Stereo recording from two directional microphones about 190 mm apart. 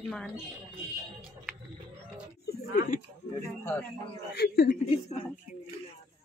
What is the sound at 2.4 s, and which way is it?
Speech, 45° left (ahead or behind).